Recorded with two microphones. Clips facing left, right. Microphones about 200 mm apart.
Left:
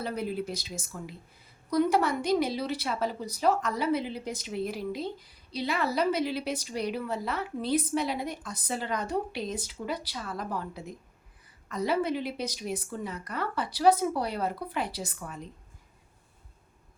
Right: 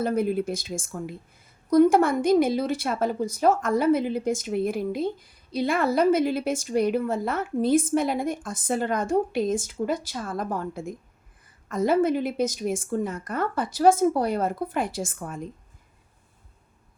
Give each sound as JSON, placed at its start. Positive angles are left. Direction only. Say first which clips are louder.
{"t": 0.0, "sound": "a woman's voice", "louder": "right 8 dB", "side_deg": -50}